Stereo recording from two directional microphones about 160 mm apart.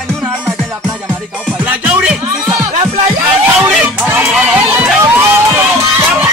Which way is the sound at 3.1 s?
10° right (ahead or behind).